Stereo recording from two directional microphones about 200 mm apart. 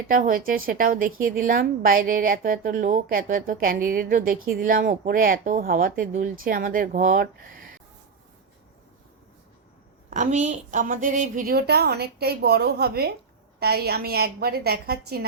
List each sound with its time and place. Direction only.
0.1 s a woman's voice: 45° right (ahead or behind)
10.1 s a woman's voice: 35° right (ahead or behind)